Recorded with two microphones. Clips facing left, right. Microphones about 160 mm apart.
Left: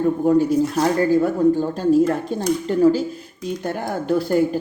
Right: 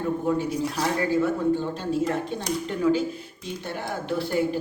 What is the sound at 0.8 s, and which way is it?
Speech, 40° left (ahead or behind).